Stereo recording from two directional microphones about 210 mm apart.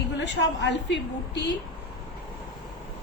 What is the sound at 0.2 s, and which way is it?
A woman's voice, 55° left (ahead or behind).